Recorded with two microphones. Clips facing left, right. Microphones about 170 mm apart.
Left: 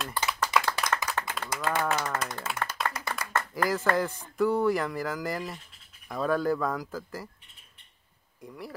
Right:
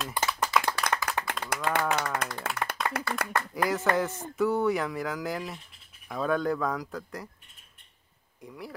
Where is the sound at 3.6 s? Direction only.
Centre (ahead or behind).